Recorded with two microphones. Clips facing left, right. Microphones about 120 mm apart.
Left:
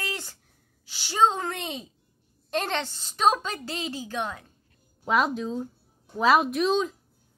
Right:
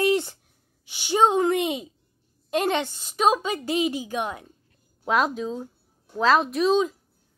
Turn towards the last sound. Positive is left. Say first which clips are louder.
# right 3 dB
turn(degrees=0)  # may be behind; listen again after turning